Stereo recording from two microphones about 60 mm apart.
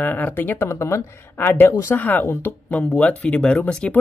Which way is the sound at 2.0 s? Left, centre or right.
Left.